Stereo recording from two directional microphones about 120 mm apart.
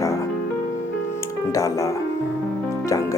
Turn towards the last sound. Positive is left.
turn(degrees=25)  # may be behind; listen again after turning